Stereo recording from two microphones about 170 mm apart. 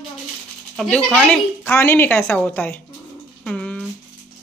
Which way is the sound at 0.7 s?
5° left (ahead or behind).